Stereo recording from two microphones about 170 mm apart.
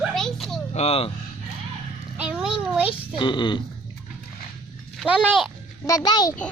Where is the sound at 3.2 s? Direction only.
25° left (ahead or behind).